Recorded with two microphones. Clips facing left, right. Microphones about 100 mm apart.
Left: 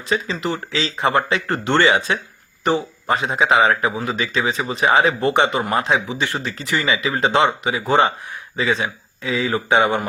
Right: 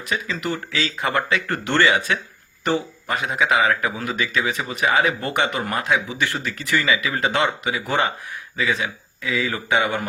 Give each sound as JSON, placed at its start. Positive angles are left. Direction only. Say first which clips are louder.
{"t": 0.1, "sound": "speech", "louder": "left 4 dB", "side_deg": 25}